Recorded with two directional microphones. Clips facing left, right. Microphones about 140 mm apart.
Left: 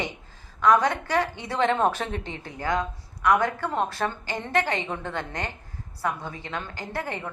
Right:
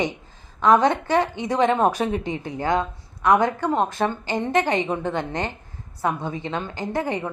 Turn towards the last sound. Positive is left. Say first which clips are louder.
# right 7 dB
turn(degrees=-15)  # may be behind; listen again after turning